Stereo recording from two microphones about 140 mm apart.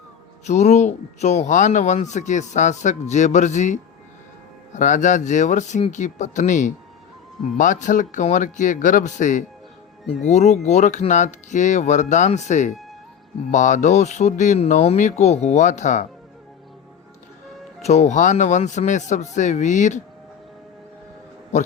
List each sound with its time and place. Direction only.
0.4 s speech: 55° left (ahead or behind)
17.8 s speech: 55° left (ahead or behind)